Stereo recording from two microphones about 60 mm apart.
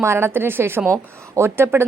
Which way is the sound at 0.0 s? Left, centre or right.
Right.